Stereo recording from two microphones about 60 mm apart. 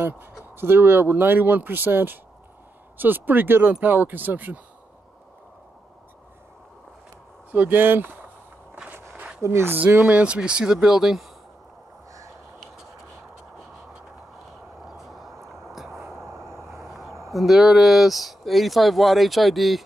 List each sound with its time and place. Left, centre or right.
0.0 s speech: right
7.5 s speech: right
9.4 s speech: right
9.8 s speech: right
10.1 s speech: centre
14.9 s vehicle: centre
16.4 s vehicle: right
16.8 s a sound: centre
17.3 s speech: centre